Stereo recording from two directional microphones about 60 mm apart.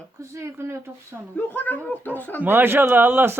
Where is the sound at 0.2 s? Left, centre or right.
Right.